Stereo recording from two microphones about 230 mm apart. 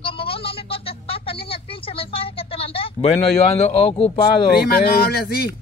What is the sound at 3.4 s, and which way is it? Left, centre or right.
Speech, left.